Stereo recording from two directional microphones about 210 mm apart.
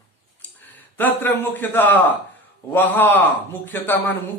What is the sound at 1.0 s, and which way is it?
A man's voice, 10° left (ahead or behind).